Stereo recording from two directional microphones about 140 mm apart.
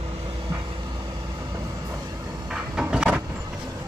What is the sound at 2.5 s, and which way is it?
Cupboard open or close, 5° right (ahead or behind).